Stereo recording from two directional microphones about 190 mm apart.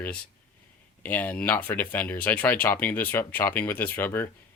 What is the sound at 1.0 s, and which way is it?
Speech, 10° left (ahead or behind).